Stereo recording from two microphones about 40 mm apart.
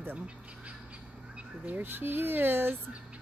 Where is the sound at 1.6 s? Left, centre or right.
Right.